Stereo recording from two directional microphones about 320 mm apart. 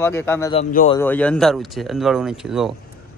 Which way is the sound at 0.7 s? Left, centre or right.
Left.